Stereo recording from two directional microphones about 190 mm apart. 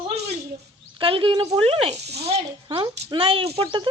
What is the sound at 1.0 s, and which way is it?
Speech, 30° right (ahead or behind).